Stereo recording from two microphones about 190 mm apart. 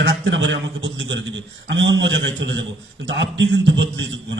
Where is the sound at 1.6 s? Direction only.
75° right (ahead or behind).